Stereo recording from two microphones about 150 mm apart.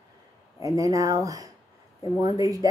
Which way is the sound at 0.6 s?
20° right (ahead or behind).